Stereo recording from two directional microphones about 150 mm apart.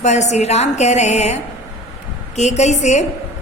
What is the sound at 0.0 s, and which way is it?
A man's voice, 50° left (ahead or behind).